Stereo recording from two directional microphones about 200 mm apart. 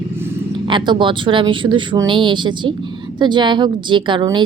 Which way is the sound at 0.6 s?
25° right (ahead or behind).